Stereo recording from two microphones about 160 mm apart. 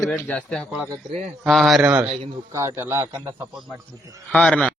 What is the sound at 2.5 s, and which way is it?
Speech, 20° right (ahead or behind).